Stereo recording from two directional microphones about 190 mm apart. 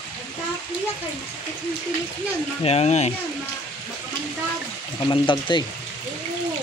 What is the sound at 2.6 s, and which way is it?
Speech, 35° left (ahead or behind).